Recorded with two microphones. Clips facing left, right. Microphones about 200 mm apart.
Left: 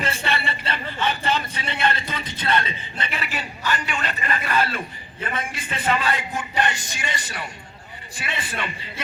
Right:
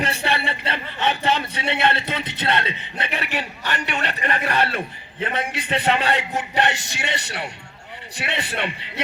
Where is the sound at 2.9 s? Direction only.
60° right (ahead or behind).